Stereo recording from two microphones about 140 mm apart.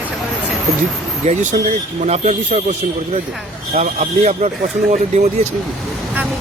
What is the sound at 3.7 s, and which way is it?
Speech, 55° right (ahead or behind).